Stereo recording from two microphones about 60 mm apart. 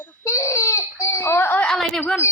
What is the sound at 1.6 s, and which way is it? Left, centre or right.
Speech, centre.